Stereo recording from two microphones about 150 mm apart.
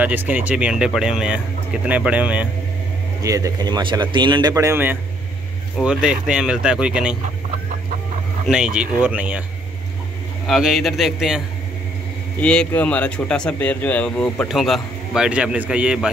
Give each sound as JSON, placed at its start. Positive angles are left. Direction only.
{"t": 0.0, "sound": "a man's voice", "side_deg": -10}
{"t": 3.2, "sound": "a man's voice", "side_deg": -20}
{"t": 5.8, "sound": "speech", "side_deg": -5}
{"t": 8.5, "sound": "a man's voice", "side_deg": -5}
{"t": 10.4, "sound": "speech", "side_deg": 0}
{"t": 12.4, "sound": "speech", "side_deg": 10}
{"t": 14.6, "sound": "a man's voice", "side_deg": 0}